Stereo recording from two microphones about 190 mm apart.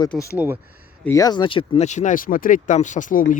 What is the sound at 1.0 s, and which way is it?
Speech, 20° left (ahead or behind).